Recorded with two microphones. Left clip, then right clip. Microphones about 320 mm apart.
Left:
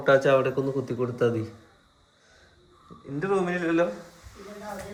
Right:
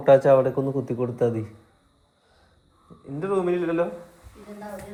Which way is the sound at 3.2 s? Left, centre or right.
Centre.